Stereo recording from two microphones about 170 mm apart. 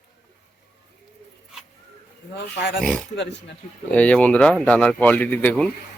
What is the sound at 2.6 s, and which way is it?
Speech, 60° left (ahead or behind).